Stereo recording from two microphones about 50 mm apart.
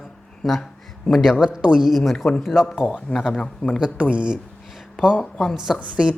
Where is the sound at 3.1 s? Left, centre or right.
Left.